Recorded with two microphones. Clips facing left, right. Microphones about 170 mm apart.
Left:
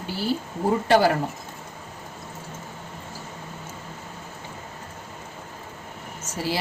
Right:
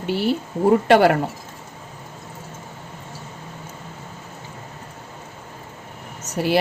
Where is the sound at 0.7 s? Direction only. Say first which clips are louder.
Right 5 dB; 65° right (ahead or behind).